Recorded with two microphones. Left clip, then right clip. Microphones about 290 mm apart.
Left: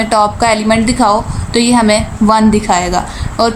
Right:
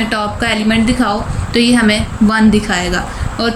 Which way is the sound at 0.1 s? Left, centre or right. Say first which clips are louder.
Left 6 dB; centre.